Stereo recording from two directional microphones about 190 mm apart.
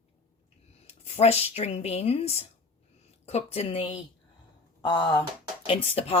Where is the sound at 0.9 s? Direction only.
35° left (ahead or behind).